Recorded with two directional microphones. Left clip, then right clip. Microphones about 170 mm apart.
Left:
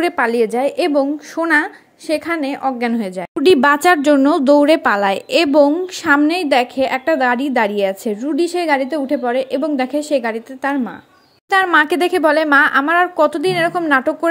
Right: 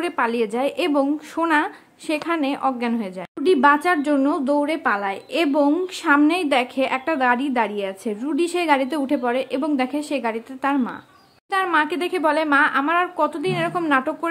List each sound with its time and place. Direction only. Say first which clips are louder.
0.0 s a woman's voice: left 6 dB; 20° left (ahead or behind)
3.4 s speech: left 5 dB; 40° left (ahead or behind)
6.0 s a woman's voice: left 4 dB; 20° left (ahead or behind)
11.6 s a woman's voice: left 6 dB; 35° left (ahead or behind)